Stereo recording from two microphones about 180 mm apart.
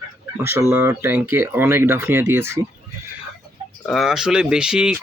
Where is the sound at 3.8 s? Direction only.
Centre (ahead or behind).